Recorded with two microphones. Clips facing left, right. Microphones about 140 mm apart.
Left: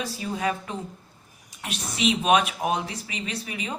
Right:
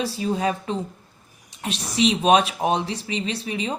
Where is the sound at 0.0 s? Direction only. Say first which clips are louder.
Right 5 dB; 30° right (ahead or behind).